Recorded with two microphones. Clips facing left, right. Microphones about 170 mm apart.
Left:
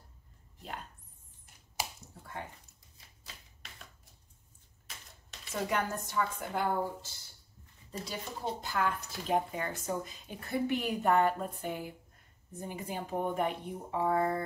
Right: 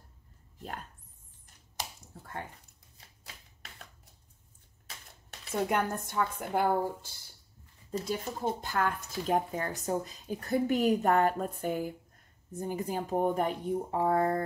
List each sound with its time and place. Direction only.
5.5 s a woman's voice: 55° right (ahead or behind); by 14.4 s 40° right (ahead or behind)